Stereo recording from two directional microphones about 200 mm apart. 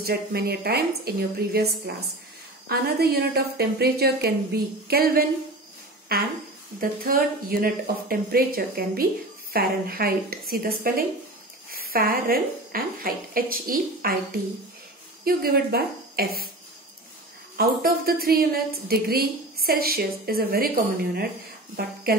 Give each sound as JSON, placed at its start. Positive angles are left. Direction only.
{"t": 0.0, "sound": "a woman's voice", "side_deg": -55}
{"t": 2.7, "sound": "a woman's voice", "side_deg": -50}
{"t": 6.8, "sound": "a woman's voice", "side_deg": -45}
{"t": 15.2, "sound": "a woman's voice", "side_deg": -50}
{"t": 17.6, "sound": "a woman's voice", "side_deg": -50}